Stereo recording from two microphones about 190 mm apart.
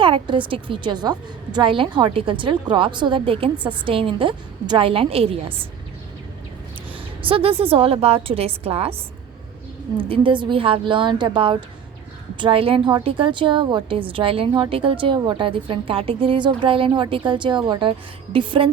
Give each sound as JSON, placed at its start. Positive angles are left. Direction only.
{"t": 0.0, "sound": "a woman's voice", "side_deg": -25}
{"t": 7.2, "sound": "a woman's voice", "side_deg": -30}
{"t": 10.1, "sound": "a woman's voice", "side_deg": -25}